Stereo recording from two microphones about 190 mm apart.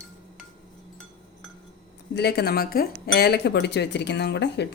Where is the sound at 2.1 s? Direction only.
60° left (ahead or behind).